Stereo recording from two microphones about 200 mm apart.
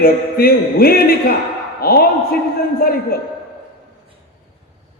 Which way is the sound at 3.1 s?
50° left (ahead or behind).